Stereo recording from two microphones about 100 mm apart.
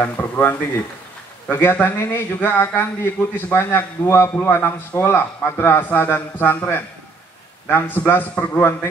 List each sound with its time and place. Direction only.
0.0 s a man's voice: 20° left (ahead or behind)